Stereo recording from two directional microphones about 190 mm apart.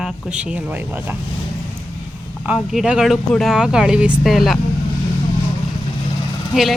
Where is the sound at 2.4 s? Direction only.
5° right (ahead or behind).